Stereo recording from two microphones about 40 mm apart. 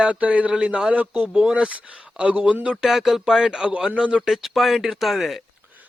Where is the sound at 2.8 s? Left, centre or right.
Centre.